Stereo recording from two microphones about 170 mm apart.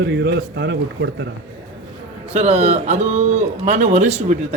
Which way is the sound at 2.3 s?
40° right (ahead or behind).